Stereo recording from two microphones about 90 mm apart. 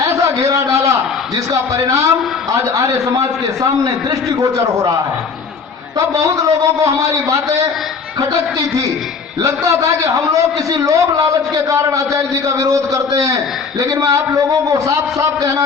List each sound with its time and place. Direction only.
0.0 s a sound: 35° right (ahead or behind)
1.5 s a man's voice: 40° right (ahead or behind)
6.0 s a man's voice: 40° right (ahead or behind)